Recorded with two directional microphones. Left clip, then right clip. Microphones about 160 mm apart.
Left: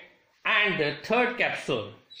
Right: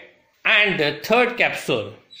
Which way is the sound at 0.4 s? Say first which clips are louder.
Right 7 dB; 15° right (ahead or behind).